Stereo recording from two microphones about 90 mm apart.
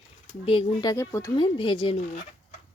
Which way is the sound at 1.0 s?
30° left (ahead or behind).